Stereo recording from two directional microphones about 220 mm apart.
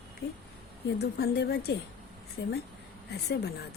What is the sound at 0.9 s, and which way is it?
Speech, 50° left (ahead or behind).